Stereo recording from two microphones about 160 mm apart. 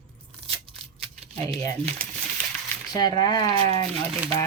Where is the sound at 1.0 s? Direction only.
5° left (ahead or behind).